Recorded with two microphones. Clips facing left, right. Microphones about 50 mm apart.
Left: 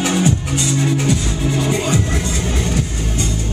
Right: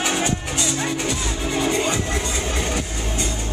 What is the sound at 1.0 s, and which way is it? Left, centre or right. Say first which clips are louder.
Music: left 6 dB; centre.